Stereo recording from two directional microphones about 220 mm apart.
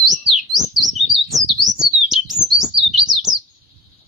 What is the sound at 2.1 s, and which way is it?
Chirp, centre (ahead or behind).